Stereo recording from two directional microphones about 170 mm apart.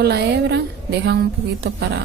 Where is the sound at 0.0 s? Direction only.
70° right (ahead or behind).